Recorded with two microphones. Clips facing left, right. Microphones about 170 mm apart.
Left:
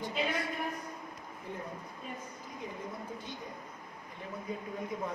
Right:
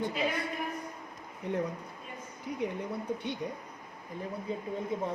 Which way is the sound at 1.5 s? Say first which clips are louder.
Right 10 dB; 70° right (ahead or behind).